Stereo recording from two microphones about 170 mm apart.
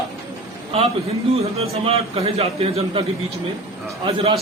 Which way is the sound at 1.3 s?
35° right (ahead or behind).